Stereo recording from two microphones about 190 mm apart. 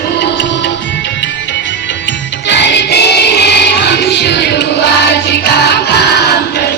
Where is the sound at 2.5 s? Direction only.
65° left (ahead or behind).